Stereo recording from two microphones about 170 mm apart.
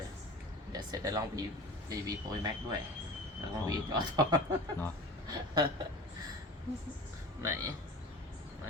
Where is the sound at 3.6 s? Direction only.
25° right (ahead or behind).